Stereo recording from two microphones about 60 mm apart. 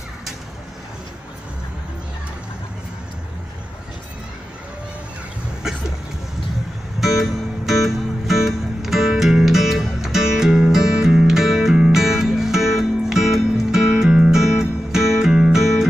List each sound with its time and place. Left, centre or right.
7.0 s music: centre